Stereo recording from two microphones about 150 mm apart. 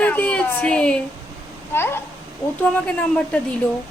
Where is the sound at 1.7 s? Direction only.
15° left (ahead or behind).